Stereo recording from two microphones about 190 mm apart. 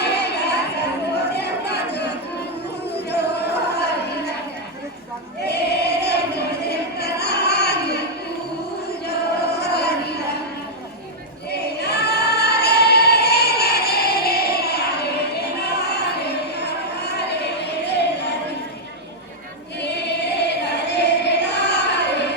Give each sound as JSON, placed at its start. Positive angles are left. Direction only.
{"t": 0.0, "sound": "chatter", "side_deg": 60}
{"t": 3.1, "sound": "a sound", "side_deg": 60}
{"t": 5.5, "sound": "choir", "side_deg": 60}
{"t": 9.0, "sound": "a sound", "side_deg": 55}
{"t": 11.8, "sound": "singing", "side_deg": 60}
{"t": 19.8, "sound": "choir", "side_deg": 60}